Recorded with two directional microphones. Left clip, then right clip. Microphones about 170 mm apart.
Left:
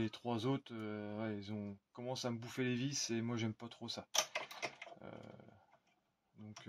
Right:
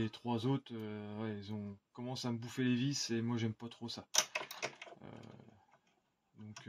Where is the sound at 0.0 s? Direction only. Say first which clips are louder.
Right 1 dB; 40° left (ahead or behind).